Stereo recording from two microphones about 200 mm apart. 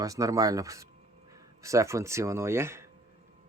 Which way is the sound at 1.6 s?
15° right (ahead or behind).